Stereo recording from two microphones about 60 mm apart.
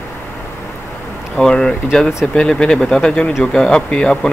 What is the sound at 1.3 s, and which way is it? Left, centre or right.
Speech, centre.